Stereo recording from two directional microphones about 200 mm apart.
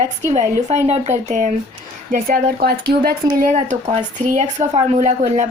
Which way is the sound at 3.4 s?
40° right (ahead or behind).